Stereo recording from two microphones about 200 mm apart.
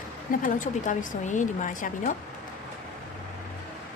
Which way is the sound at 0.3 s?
40° left (ahead or behind).